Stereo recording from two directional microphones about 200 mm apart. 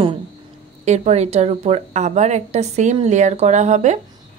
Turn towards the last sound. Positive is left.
turn(degrees=-35)  # may be behind; listen again after turning